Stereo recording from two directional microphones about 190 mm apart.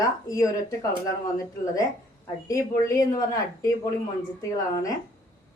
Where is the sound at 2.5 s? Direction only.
15° left (ahead or behind).